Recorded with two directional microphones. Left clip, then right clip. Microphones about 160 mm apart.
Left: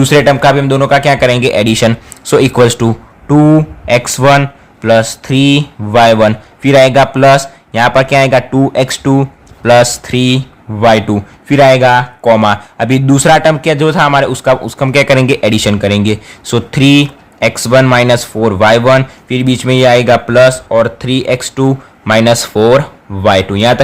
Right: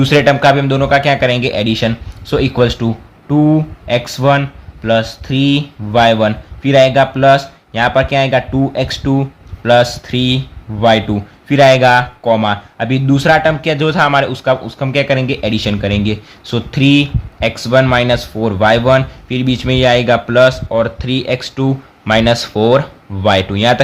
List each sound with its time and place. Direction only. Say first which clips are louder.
0.0 s a man's voice: left 3 dB; 25° left (ahead or behind)
12.2 s a man's voice: left 5 dB; 35° left (ahead or behind)